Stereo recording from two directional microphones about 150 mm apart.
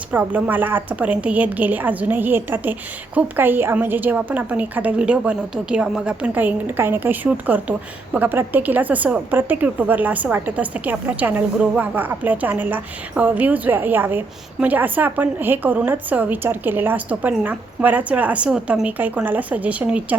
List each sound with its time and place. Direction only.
0.1 s a woman's voice: 10° right (ahead or behind)